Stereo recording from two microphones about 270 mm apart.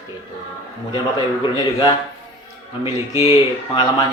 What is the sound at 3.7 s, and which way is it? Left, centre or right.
Speech, centre.